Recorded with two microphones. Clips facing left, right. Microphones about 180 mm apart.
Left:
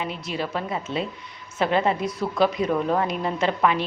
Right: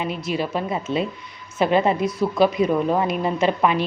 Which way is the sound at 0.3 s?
10° right (ahead or behind).